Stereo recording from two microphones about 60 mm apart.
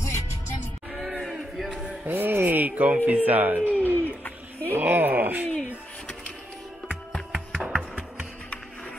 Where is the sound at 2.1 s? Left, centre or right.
Right.